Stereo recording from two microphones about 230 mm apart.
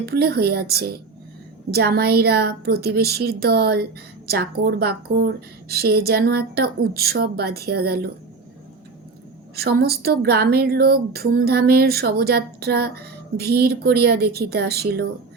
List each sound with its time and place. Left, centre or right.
0.0 s a woman's voice: right
9.6 s a woman's voice: right